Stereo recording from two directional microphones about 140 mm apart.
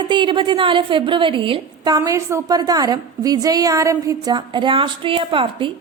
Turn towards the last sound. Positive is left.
turn(degrees=-40)  # may be behind; listen again after turning